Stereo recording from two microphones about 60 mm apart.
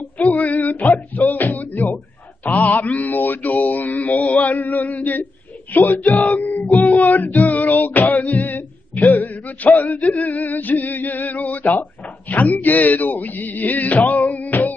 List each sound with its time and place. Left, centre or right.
0.4 s music: left
2.4 s mantra: left
5.7 s speech: left
6.9 s music: left
12.3 s a sound: left